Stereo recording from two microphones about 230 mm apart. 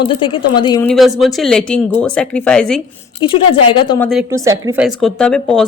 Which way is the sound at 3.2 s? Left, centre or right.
Left.